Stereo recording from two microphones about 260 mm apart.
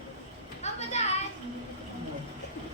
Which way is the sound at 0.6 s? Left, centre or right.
Left.